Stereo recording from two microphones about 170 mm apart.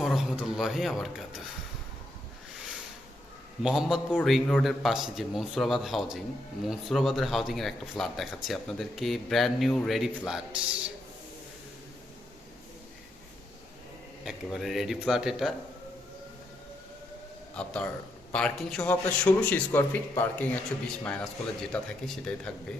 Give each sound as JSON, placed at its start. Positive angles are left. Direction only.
{"t": 0.0, "sound": "speech", "side_deg": 0}
{"t": 3.6, "sound": "a man's voice", "side_deg": 0}
{"t": 14.3, "sound": "a man's voice", "side_deg": 0}
{"t": 17.6, "sound": "a man's voice", "side_deg": 5}